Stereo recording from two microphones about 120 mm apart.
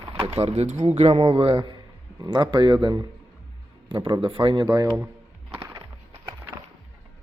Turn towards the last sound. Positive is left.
turn(degrees=-20)  # may be behind; listen again after turning